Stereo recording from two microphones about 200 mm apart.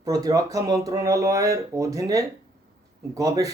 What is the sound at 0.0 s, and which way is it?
Speech, 15° right (ahead or behind).